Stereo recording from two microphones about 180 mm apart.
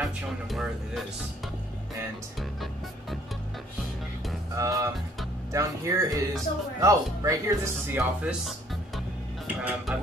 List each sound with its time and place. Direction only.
0.0 s speech: centre (ahead or behind)
4.6 s music: 20° right (ahead or behind)
5.5 s speech: 15° right (ahead or behind)
9.6 s music: 5° right (ahead or behind)